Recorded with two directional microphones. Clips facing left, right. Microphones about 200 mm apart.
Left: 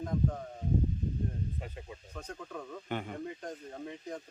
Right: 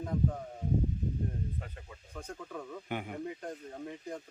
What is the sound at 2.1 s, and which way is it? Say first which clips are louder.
Speech: right 1 dB; 5° right (ahead or behind).